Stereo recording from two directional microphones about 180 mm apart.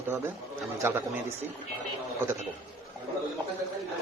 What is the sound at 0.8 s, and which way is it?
Speech, 10° right (ahead or behind).